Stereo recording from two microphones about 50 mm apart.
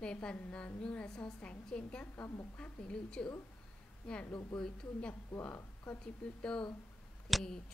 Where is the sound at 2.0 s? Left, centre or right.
Left.